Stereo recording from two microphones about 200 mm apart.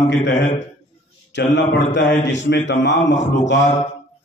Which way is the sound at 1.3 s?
65° left (ahead or behind).